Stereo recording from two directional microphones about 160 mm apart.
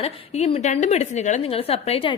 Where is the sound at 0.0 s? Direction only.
40° left (ahead or behind).